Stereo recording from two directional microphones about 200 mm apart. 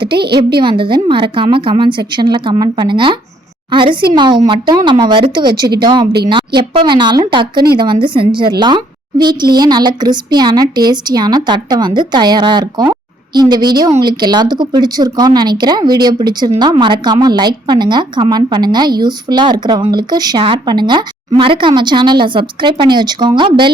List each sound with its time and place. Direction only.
0.6 s a woman's voice: 25° right (ahead or behind)